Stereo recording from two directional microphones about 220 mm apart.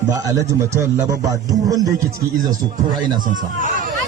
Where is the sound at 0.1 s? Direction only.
15° right (ahead or behind).